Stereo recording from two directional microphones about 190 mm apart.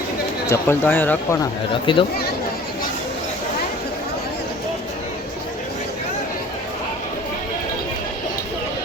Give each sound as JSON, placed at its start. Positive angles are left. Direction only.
{"t": 0.5, "sound": "speech", "side_deg": 10}
{"t": 1.7, "sound": "speech", "side_deg": 25}